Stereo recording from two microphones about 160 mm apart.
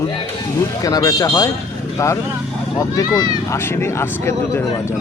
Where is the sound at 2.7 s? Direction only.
20° left (ahead or behind).